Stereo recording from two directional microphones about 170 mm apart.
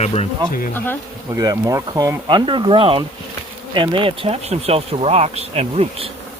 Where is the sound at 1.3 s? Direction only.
20° right (ahead or behind).